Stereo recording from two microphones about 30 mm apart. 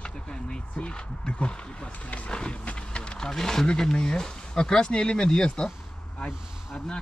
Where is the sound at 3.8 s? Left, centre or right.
Left.